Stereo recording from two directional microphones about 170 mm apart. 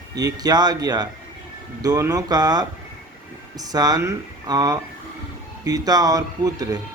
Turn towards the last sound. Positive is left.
turn(degrees=-20)  # may be behind; listen again after turning